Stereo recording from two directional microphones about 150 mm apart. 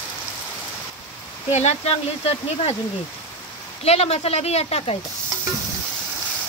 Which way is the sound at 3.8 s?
45° left (ahead or behind).